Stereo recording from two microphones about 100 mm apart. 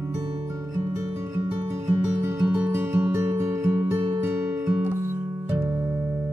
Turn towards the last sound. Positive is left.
turn(degrees=-20)  # may be behind; listen again after turning